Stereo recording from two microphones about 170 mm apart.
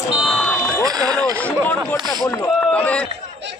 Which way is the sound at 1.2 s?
10° left (ahead or behind).